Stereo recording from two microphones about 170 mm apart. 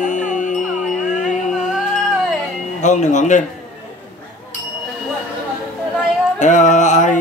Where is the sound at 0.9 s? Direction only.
45° left (ahead or behind).